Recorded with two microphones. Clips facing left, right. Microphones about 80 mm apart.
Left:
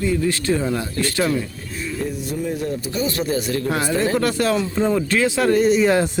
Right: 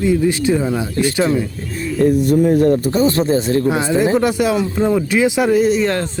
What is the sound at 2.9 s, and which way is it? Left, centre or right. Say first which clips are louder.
Speech: right 8 dB; right.